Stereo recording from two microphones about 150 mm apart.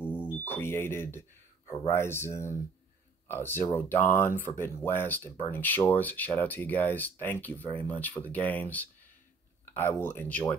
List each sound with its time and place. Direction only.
0.5 s speech: 15° left (ahead or behind)